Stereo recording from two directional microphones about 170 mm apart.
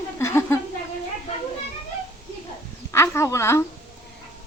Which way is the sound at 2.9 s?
15° left (ahead or behind).